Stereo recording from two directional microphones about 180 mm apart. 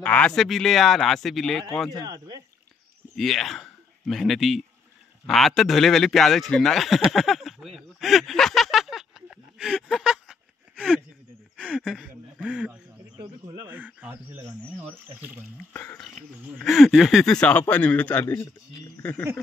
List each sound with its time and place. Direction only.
0.0 s a man's voice: 5° left (ahead or behind)
2.0 s speech: 20° right (ahead or behind)
3.2 s a man's voice: centre (ahead or behind)
11.5 s speech: 5° left (ahead or behind)
15.7 s speech: 10° left (ahead or behind)
18.9 s a sound: 10° left (ahead or behind)